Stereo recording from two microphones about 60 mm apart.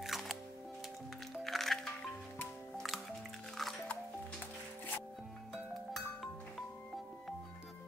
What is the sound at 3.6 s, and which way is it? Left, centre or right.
Music, centre.